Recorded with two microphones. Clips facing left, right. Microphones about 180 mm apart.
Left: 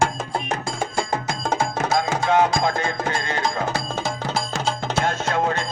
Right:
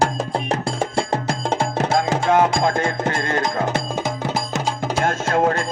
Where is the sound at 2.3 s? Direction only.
50° right (ahead or behind).